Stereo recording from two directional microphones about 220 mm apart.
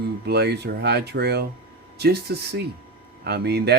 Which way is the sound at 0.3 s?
50° right (ahead or behind).